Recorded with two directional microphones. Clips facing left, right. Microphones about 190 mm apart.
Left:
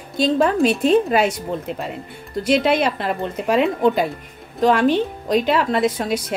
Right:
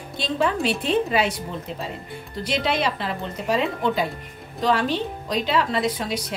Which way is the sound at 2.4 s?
50° left (ahead or behind).